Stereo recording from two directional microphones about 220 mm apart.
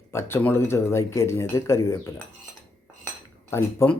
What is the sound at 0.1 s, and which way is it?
Speech, 10° left (ahead or behind).